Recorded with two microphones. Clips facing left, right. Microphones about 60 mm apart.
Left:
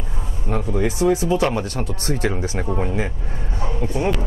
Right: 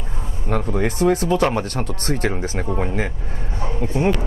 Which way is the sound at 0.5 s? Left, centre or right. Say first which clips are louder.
Even; right.